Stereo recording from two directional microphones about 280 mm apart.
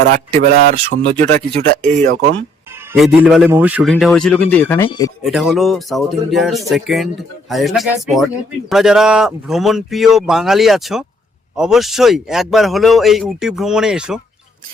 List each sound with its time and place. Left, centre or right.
0.3 s speech: right
2.9 s speech: centre
5.2 s speech: centre